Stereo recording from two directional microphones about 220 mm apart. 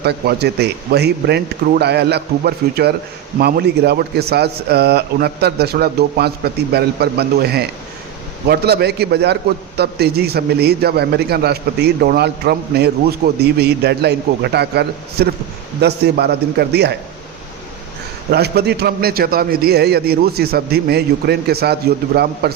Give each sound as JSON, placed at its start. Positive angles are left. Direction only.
{"t": 0.0, "sound": "a man's voice", "side_deg": -50}
{"t": 18.3, "sound": "a man's voice", "side_deg": -45}